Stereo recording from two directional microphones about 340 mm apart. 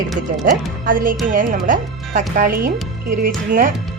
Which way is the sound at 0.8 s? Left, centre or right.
Right.